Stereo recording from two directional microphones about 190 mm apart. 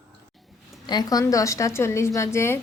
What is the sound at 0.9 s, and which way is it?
A woman's voice, 20° left (ahead or behind).